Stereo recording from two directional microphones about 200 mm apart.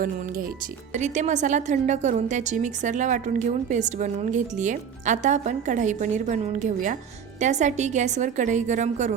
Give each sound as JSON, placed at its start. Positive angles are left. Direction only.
{"t": 0.0, "sound": "a woman's voice", "side_deg": -45}